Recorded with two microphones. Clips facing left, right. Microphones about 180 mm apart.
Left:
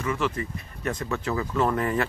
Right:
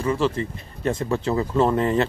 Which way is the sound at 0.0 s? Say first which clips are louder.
Right 5 dB; 30° right (ahead or behind).